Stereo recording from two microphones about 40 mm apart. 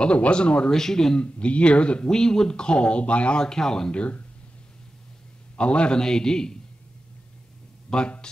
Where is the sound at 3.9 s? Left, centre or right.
Left.